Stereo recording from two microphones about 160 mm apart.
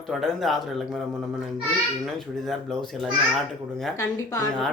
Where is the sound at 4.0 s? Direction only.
20° left (ahead or behind).